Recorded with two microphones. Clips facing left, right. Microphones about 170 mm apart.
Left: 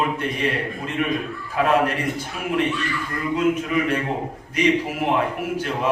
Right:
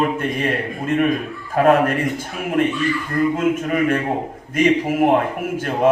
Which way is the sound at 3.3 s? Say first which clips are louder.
Right 1 dB; 50° right (ahead or behind).